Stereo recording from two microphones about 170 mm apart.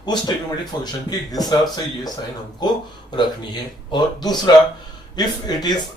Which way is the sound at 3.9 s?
25° left (ahead or behind).